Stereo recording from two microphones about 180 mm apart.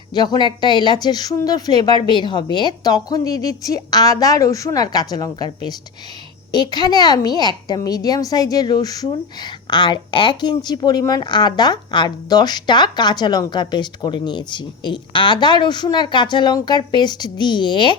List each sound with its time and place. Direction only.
0.1 s a woman's voice: 25° left (ahead or behind)